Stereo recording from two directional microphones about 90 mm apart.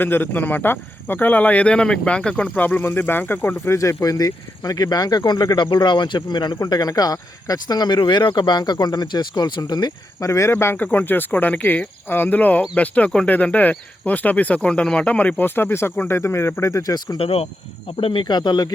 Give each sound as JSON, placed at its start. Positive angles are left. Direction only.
{"t": 0.0, "sound": "speech", "side_deg": 20}
{"t": 17.2, "sound": "speech", "side_deg": 90}